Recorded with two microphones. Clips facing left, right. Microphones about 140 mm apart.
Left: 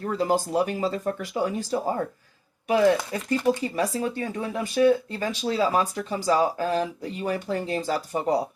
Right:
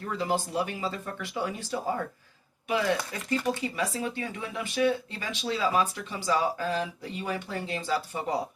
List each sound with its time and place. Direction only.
0.0 s speech: 40° left (ahead or behind)